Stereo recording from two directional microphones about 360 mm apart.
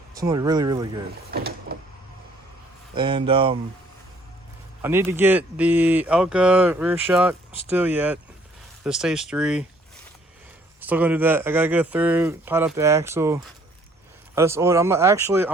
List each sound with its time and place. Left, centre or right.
0.1 s speech: centre
1.3 s mechanisms: right
2.9 s speech: centre
4.8 s speech: centre
10.8 s speech: centre